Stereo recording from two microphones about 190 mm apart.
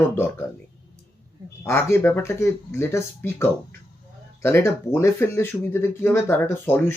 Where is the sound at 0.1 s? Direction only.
10° left (ahead or behind).